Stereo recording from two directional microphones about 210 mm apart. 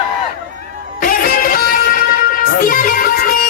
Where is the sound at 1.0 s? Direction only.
45° left (ahead or behind).